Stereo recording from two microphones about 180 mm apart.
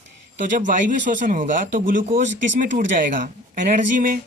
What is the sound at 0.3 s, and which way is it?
Speech, 45° right (ahead or behind).